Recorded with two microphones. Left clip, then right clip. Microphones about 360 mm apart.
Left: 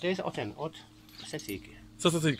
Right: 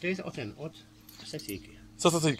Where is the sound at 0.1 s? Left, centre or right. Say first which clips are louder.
Left 3 dB; left.